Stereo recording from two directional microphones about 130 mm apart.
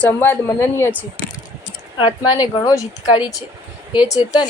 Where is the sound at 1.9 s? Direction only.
35° left (ahead or behind).